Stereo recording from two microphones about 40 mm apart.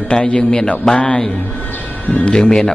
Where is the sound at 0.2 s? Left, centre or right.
Left.